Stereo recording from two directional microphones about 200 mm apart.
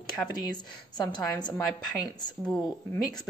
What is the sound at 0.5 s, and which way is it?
Speech, 20° left (ahead or behind).